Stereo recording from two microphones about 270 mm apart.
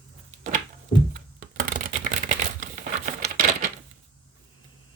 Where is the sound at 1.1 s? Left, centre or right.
Right.